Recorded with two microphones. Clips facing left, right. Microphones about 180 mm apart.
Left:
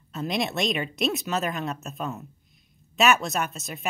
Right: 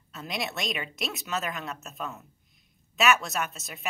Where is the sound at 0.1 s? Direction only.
30° left (ahead or behind).